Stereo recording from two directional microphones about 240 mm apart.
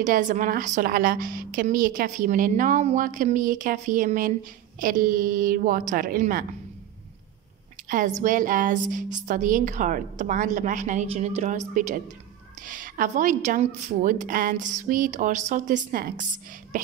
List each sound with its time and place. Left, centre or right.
0.0 s a woman's voice: right
7.9 s a woman's voice: right